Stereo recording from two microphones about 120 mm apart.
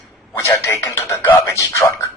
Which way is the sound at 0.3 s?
25° left (ahead or behind).